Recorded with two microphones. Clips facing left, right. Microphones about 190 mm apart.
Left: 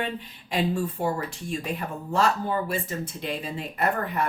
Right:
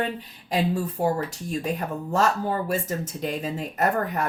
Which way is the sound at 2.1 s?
45° right (ahead or behind).